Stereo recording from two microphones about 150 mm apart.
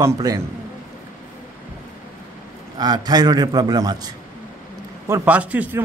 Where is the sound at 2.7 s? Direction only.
25° right (ahead or behind).